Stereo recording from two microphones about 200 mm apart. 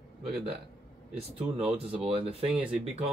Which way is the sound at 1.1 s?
30° right (ahead or behind).